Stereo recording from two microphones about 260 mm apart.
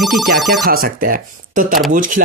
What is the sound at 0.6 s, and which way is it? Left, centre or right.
Speech, right.